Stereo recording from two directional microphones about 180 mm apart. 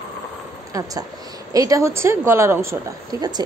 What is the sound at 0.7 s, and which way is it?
A woman's voice, 20° right (ahead or behind).